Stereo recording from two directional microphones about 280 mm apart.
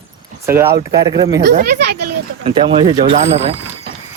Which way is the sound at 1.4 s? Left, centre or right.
Right.